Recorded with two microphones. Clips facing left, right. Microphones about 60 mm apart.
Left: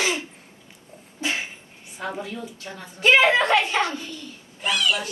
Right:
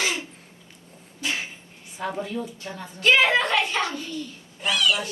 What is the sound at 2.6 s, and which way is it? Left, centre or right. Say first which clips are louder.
A woman's voice: left 2 dB; left.